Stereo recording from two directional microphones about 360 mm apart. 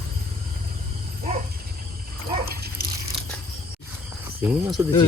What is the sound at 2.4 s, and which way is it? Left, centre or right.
Dog, right.